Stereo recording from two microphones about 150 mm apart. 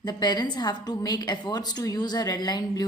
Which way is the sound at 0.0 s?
30° left (ahead or behind).